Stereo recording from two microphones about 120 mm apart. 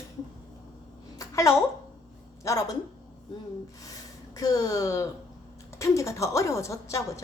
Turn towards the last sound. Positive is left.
turn(degrees=25)  # may be behind; listen again after turning